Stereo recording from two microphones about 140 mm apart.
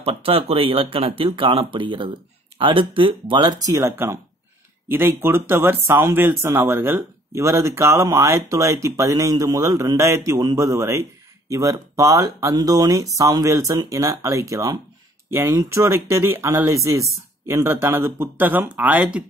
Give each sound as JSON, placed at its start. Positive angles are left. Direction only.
{"t": 0.0, "sound": "speech", "side_deg": -45}